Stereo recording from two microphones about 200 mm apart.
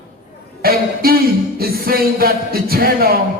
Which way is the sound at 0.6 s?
50° right (ahead or behind).